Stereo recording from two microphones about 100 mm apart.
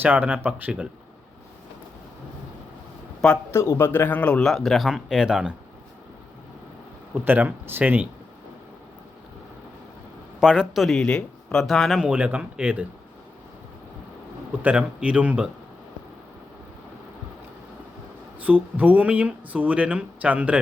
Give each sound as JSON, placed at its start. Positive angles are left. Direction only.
{"t": 0.0, "sound": "speech", "side_deg": -15}
{"t": 3.5, "sound": "speech", "side_deg": 25}
{"t": 7.1, "sound": "speech", "side_deg": -15}
{"t": 10.4, "sound": "speech", "side_deg": -5}
{"t": 14.6, "sound": "speech", "side_deg": -15}
{"t": 18.4, "sound": "speech", "side_deg": -15}